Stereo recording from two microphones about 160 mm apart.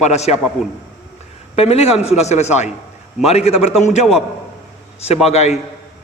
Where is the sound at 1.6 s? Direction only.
40° left (ahead or behind).